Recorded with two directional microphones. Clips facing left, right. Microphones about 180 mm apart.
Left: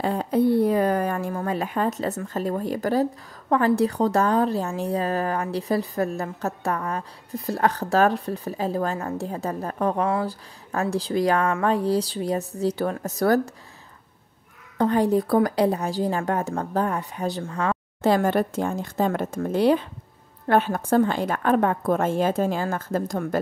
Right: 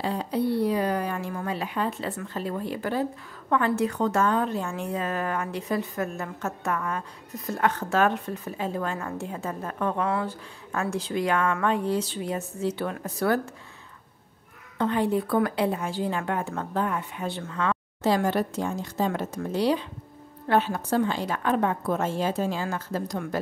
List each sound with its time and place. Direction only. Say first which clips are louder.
0.0 s a woman's voice: left 5 dB; 50° left (ahead or behind)
14.8 s a woman's voice: left 4 dB; 40° left (ahead or behind)
18.0 s a woman's voice: left 3 dB; 55° left (ahead or behind)